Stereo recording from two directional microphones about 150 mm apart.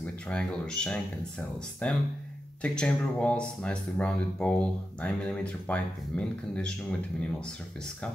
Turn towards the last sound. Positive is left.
turn(degrees=10)  # may be behind; listen again after turning